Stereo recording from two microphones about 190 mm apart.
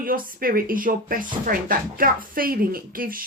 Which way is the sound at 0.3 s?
50° right (ahead or behind).